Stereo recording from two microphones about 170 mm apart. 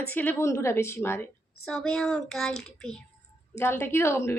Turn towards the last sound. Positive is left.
turn(degrees=15)  # may be behind; listen again after turning